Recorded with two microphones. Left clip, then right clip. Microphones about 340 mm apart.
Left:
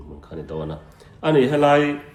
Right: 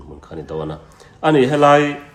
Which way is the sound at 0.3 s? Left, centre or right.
Right.